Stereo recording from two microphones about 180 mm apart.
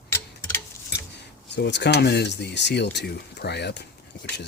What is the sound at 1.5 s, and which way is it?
Speech, 70° left (ahead or behind).